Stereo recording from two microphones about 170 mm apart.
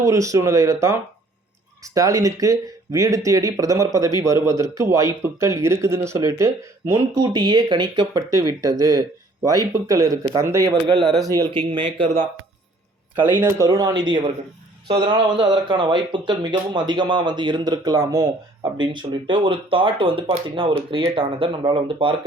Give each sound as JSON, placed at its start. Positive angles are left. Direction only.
{"t": 0.0, "sound": "speech", "side_deg": -20}
{"t": 10.7, "sound": "speech", "side_deg": -30}
{"t": 13.1, "sound": "speech", "side_deg": -10}